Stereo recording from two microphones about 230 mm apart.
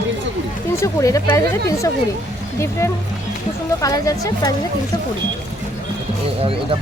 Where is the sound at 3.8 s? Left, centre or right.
Centre.